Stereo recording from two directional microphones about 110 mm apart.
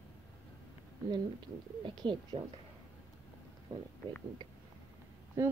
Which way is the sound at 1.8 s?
45° right (ahead or behind).